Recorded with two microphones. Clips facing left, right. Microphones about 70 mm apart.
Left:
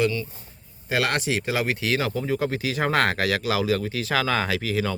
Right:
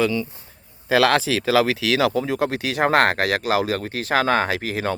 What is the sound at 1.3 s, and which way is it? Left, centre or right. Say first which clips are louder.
Speech: right 6 dB; right.